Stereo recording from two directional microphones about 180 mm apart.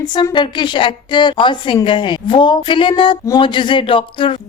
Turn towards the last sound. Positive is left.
turn(degrees=30)  # may be behind; listen again after turning